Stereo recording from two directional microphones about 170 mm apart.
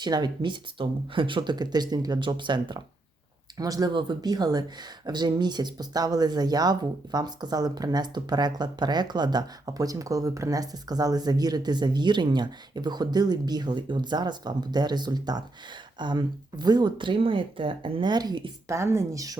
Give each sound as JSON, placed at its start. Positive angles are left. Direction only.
{"t": 0.0, "sound": "speech", "side_deg": -25}